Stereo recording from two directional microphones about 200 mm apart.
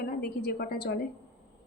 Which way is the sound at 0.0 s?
50° left (ahead or behind).